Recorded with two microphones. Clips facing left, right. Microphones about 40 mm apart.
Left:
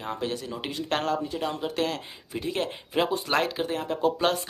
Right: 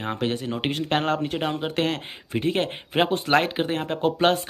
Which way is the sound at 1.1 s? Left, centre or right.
Right.